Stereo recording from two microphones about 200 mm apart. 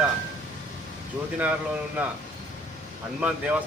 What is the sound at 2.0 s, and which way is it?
Speech, 5° right (ahead or behind).